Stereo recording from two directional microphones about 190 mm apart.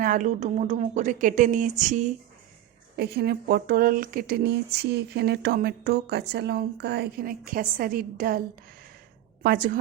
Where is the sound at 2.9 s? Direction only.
60° right (ahead or behind).